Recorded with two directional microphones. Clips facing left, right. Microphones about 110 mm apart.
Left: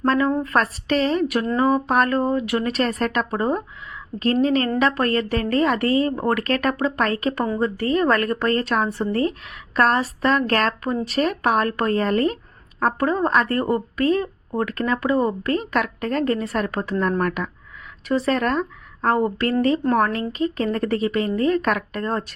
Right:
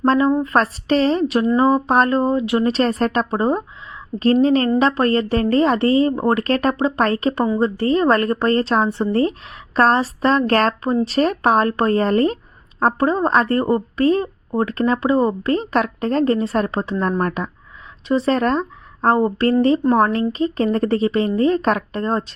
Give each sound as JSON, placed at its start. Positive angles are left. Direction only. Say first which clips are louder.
{"t": 0.0, "sound": "a woman's voice", "louder": "right 4 dB", "side_deg": -30}
{"t": 0.3, "sound": "a woman's voice", "louder": "right 4 dB", "side_deg": -15}
{"t": 0.5, "sound": "speech", "louder": "right 3 dB", "side_deg": -30}